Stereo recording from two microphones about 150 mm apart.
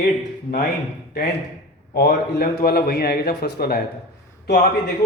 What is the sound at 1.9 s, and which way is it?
A man's voice, 90° left.